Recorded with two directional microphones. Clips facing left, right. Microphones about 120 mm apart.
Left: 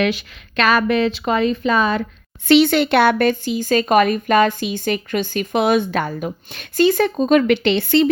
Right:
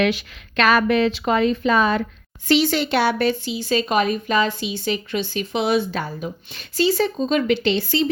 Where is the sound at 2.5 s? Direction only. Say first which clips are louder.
Left 5 dB; 60° left (ahead or behind).